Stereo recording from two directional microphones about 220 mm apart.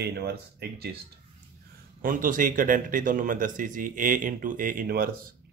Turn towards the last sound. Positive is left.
turn(degrees=-40)  # may be behind; listen again after turning